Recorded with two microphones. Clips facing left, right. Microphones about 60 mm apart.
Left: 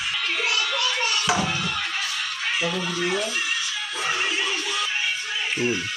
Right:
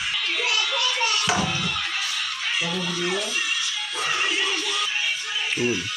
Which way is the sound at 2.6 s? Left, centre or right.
Left.